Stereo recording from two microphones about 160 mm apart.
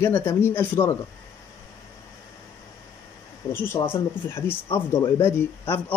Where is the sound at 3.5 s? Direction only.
15° left (ahead or behind).